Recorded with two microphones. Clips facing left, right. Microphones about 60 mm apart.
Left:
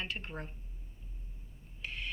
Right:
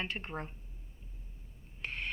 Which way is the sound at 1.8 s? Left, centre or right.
Right.